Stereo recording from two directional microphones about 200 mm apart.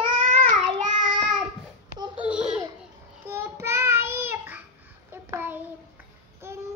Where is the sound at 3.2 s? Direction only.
10° right (ahead or behind).